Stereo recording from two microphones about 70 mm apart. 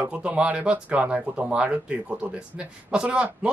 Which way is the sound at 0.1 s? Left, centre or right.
Centre.